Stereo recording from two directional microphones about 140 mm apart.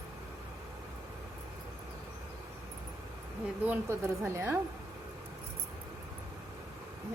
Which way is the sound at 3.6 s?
15° right (ahead or behind).